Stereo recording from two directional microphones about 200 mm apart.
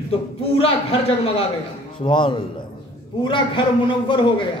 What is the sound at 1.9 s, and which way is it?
A man's voice, 25° left (ahead or behind).